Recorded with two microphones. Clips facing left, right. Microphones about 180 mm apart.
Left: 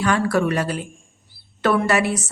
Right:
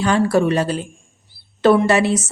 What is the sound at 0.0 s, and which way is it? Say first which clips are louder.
Speech: right 3 dB; 25° right (ahead or behind).